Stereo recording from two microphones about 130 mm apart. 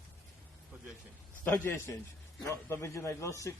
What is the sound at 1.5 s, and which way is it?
A man's voice, 20° left (ahead or behind).